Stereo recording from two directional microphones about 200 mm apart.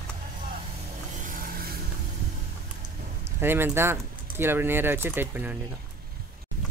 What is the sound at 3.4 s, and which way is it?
Speech, 10° right (ahead or behind).